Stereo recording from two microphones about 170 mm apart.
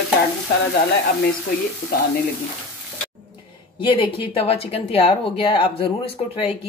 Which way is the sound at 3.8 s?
30° left (ahead or behind).